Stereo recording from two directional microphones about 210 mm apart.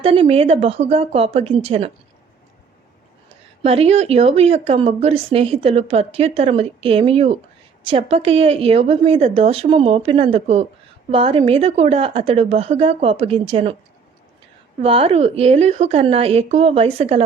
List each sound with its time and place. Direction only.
0.0 s speech: 25° right (ahead or behind)
3.6 s speech: 30° right (ahead or behind)
14.8 s speech: 30° right (ahead or behind)